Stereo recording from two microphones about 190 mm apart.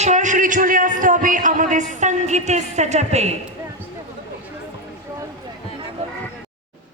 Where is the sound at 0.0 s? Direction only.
40° right (ahead or behind).